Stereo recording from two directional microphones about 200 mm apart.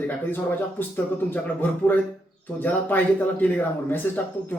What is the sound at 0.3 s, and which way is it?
Speech, 10° left (ahead or behind).